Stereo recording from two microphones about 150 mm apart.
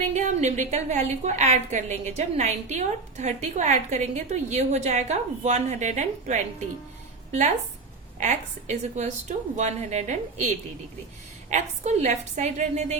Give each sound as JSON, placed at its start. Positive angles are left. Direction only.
{"t": 0.0, "sound": "a woman's voice", "side_deg": -50}
{"t": 11.5, "sound": "a woman's voice", "side_deg": -50}